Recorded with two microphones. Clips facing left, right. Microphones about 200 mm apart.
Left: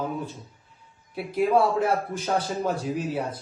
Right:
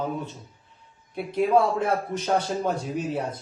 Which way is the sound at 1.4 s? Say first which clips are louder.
Even; 5° left (ahead or behind).